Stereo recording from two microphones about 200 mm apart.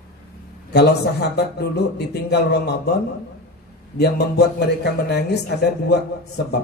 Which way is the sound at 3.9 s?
55° left (ahead or behind).